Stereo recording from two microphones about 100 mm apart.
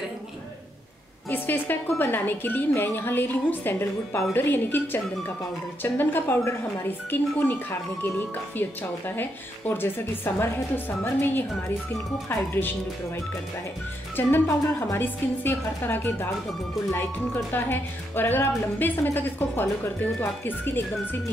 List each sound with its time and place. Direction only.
1.3 s a woman's voice: 20° left (ahead or behind)
9.1 s a woman's voice: 20° left (ahead or behind)
14.1 s a woman's voice: 25° left (ahead or behind)